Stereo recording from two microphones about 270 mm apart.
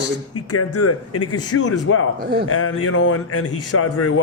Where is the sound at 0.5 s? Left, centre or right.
Left.